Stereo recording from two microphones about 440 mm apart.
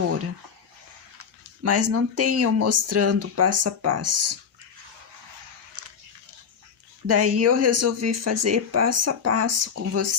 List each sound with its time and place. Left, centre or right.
1.2 s speech: right
5.8 s biting: right
7.1 s speech: right